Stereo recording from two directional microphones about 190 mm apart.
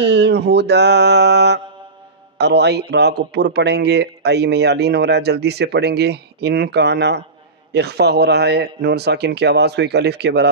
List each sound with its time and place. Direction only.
0.0 s a man's voice: 60° right (ahead or behind)